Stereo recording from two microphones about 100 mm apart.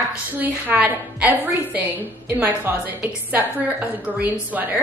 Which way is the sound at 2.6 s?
15° right (ahead or behind).